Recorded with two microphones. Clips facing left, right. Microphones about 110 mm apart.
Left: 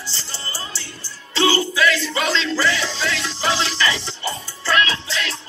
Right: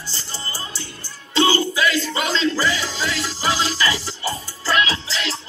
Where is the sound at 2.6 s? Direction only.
10° right (ahead or behind).